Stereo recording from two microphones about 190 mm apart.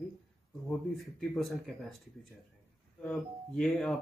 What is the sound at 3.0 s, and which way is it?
Speech, 5° left (ahead or behind).